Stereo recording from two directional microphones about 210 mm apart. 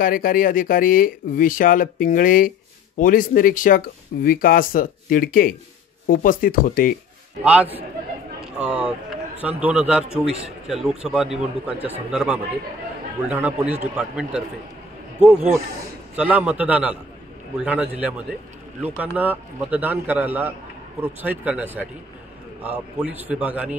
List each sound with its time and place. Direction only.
0.0 s speech: 40° left (ahead or behind)
7.4 s a man's voice: 5° right (ahead or behind)
16.2 s a man's voice: 5° right (ahead or behind)